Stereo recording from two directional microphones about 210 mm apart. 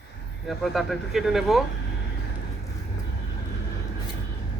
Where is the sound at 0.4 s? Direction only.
Centre (ahead or behind).